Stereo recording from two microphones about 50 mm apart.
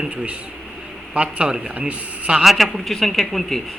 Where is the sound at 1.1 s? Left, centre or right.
Right.